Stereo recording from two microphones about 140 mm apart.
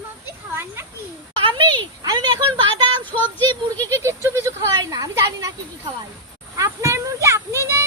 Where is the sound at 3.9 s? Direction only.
20° right (ahead or behind).